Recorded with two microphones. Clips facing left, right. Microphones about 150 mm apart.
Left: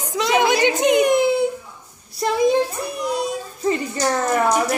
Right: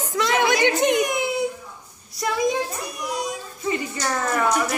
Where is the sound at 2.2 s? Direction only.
30° left (ahead or behind).